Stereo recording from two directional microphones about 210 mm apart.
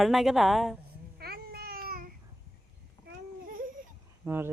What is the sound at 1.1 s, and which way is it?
Babbling, 45° right (ahead or behind).